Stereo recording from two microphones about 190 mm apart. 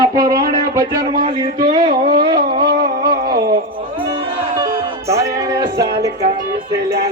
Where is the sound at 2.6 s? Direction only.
55° right (ahead or behind).